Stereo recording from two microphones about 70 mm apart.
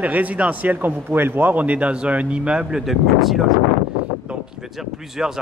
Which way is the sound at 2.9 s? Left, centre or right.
Centre.